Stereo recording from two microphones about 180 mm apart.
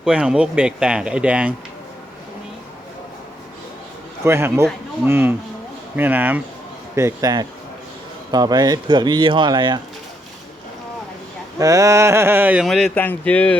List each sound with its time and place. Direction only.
0.0 s speech: 5° right (ahead or behind)
4.2 s speech: 15° right (ahead or behind)
11.6 s speech: 20° right (ahead or behind)
12.6 s speech: 5° left (ahead or behind)